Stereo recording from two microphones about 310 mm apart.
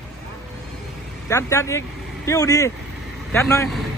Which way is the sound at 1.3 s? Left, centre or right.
Centre.